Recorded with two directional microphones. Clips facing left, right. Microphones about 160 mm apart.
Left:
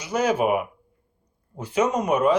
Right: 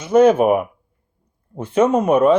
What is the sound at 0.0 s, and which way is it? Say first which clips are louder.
Speech: right 10 dB; 55° right (ahead or behind).